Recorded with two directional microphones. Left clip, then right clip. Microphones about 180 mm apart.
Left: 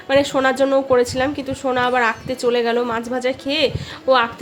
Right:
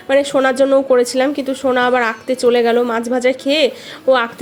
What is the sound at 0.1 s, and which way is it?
A woman's voice, 20° right (ahead or behind).